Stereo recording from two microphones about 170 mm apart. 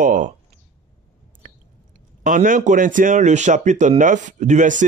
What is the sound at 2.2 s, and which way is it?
Speech, 50° right (ahead or behind).